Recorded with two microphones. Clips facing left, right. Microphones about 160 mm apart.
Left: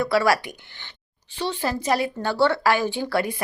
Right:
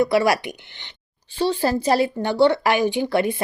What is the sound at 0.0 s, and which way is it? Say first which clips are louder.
Speech: right 2 dB; 20° right (ahead or behind).